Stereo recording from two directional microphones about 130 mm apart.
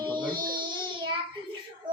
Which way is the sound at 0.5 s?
40° right (ahead or behind).